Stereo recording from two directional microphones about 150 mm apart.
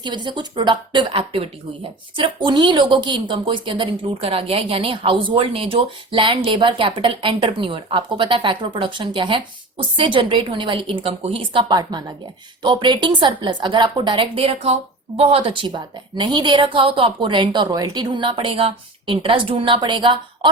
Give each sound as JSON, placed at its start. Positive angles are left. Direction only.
{"t": 0.0, "sound": "a woman's voice", "side_deg": -30}